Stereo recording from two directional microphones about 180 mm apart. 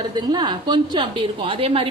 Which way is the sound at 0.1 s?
25° right (ahead or behind).